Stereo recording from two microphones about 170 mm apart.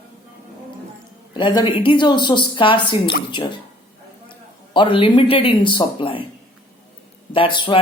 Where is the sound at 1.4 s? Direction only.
30° left (ahead or behind).